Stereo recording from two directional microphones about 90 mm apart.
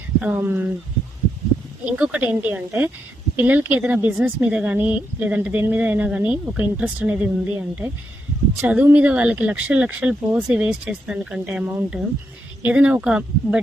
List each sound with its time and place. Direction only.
0.2 s speech: 20° right (ahead or behind)
1.8 s speech: 15° right (ahead or behind)